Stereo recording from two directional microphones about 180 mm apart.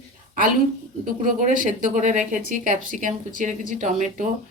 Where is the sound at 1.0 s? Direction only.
45° right (ahead or behind).